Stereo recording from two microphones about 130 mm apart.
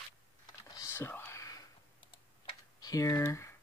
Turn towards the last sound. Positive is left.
turn(degrees=20)  # may be behind; listen again after turning